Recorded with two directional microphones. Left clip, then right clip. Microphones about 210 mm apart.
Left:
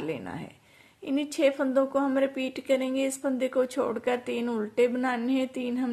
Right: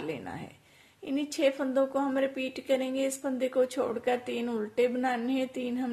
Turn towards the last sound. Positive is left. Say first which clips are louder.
# left 2 dB
turn(degrees=15)  # may be behind; listen again after turning